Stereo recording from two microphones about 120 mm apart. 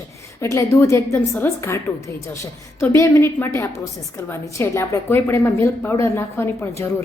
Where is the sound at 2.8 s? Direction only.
25° left (ahead or behind).